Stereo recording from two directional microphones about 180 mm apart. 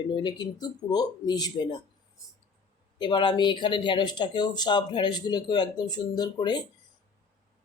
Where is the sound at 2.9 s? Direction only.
25° left (ahead or behind).